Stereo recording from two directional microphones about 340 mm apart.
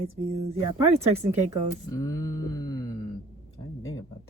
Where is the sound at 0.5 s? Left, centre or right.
Centre.